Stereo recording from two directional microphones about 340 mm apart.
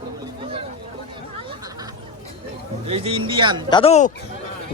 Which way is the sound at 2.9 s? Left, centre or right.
Centre.